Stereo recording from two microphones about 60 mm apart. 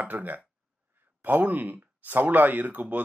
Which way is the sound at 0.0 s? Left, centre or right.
Right.